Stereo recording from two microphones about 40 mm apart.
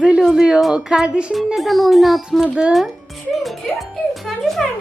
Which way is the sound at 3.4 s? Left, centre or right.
Centre.